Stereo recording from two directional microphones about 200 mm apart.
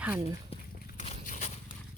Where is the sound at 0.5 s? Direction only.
30° left (ahead or behind).